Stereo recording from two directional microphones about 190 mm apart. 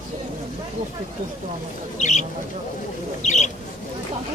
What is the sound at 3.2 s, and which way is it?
Speech, 40° left (ahead or behind).